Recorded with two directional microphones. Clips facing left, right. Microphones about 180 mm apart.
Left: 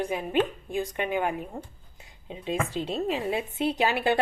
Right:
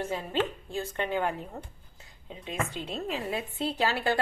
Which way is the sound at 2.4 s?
30° left (ahead or behind).